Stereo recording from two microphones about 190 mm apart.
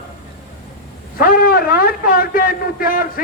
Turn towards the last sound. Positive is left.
turn(degrees=50)  # may be behind; listen again after turning